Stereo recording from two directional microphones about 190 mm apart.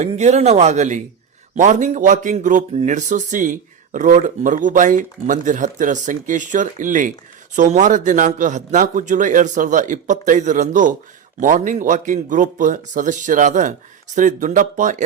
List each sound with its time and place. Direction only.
0.0 s speech: 35° right (ahead or behind)